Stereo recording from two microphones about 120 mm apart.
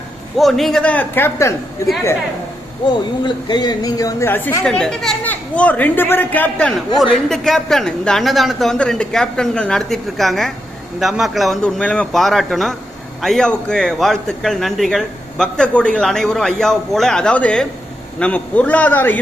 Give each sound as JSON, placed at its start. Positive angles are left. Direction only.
{"t": 0.3, "sound": "a man's voice", "side_deg": 0}
{"t": 2.8, "sound": "speech", "side_deg": 40}
{"t": 4.3, "sound": "a man's voice", "side_deg": 15}
{"t": 4.6, "sound": "a man's voice", "side_deg": 5}